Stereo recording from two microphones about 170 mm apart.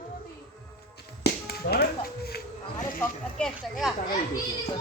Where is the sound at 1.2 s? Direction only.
70° left (ahead or behind).